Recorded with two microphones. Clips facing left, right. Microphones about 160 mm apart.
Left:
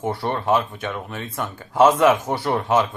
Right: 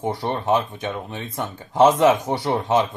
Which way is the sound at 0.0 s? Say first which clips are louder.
Even; 15° right (ahead or behind).